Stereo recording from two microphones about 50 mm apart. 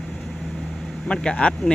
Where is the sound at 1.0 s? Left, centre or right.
Centre.